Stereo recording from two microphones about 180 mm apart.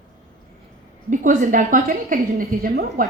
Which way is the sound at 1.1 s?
45° right (ahead or behind).